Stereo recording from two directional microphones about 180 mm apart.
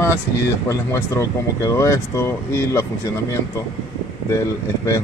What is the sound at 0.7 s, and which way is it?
Speech, 15° left (ahead or behind).